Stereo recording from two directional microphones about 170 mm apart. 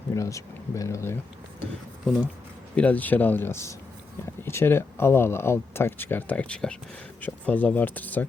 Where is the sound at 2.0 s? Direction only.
Centre (ahead or behind).